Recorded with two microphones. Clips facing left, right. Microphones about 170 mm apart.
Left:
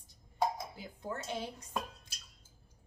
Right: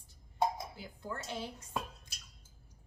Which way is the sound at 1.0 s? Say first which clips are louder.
Left 2 dB; 20° left (ahead or behind).